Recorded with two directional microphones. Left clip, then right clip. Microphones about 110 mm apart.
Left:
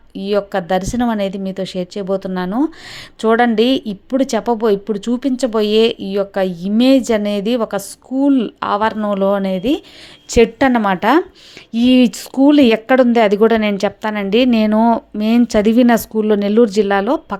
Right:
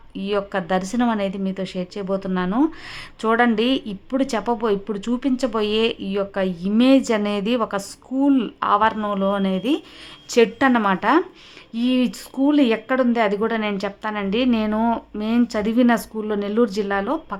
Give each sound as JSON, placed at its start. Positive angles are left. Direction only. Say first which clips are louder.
{"t": 0.1, "sound": "a woman's voice", "louder": "left 6 dB", "side_deg": 35}
{"t": 9.0, "sound": "a woman's voice", "louder": "left 6 dB", "side_deg": 55}
{"t": 11.7, "sound": "speech", "louder": "left 9 dB", "side_deg": 70}